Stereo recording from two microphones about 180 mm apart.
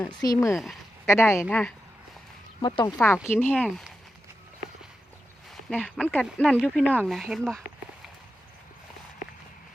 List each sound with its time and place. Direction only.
0.1 s speech: 20° left (ahead or behind)
0.5 s speech: centre (ahead or behind)
1.0 s speech: 15° left (ahead or behind)
2.6 s speech: 25° left (ahead or behind)
3.0 s speech: 15° left (ahead or behind)
5.7 s speech: 5° left (ahead or behind)